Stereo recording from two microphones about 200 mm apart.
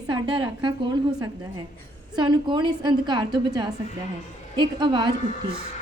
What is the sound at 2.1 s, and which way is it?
A woman's voice, 20° right (ahead or behind).